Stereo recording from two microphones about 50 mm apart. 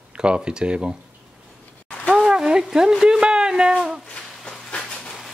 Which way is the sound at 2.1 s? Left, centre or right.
Centre.